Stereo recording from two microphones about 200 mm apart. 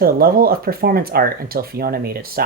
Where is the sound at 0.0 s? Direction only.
50° right (ahead or behind).